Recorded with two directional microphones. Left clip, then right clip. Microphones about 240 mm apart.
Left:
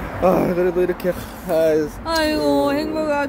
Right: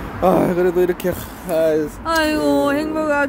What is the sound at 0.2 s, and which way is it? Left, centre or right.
Speech, centre.